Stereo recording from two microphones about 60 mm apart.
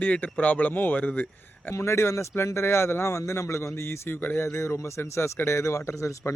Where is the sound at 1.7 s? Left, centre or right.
Left.